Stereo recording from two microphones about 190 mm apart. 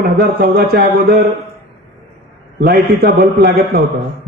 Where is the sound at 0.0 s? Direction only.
55° right (ahead or behind).